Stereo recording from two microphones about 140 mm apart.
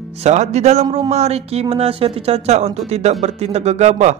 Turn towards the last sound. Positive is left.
turn(degrees=-55)  # may be behind; listen again after turning